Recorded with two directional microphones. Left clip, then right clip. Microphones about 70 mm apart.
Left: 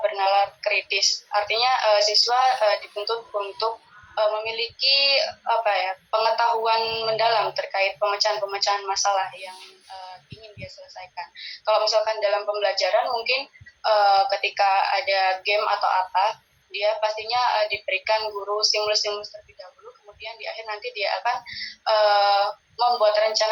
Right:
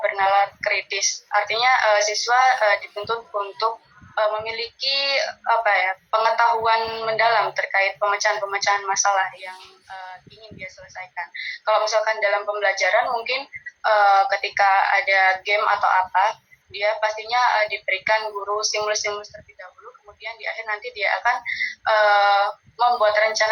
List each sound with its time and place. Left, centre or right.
0.0 s a woman's voice: right
20.2 s a woman's voice: right